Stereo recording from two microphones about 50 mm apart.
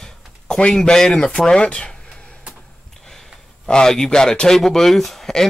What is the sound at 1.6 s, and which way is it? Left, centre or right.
Speech, centre.